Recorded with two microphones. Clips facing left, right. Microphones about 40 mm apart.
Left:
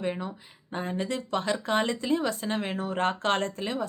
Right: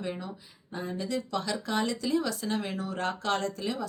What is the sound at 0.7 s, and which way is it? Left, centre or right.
Speech, left.